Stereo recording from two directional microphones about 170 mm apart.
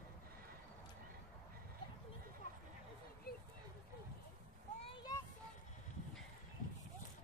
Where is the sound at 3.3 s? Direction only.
65° left (ahead or behind).